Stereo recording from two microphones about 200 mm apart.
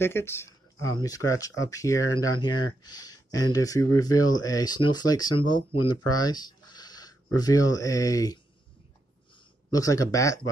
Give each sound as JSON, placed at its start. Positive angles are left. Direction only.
{"t": 0.0, "sound": "speech", "side_deg": 10}
{"t": 9.7, "sound": "speech", "side_deg": 15}